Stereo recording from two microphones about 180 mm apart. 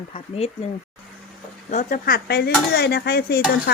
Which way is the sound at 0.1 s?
35° left (ahead or behind).